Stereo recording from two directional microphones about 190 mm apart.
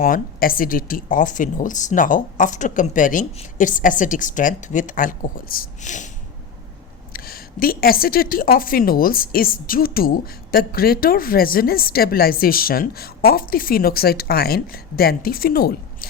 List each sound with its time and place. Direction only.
0.0 s a woman's voice: 50° left (ahead or behind)
7.1 s a woman's voice: 50° left (ahead or behind)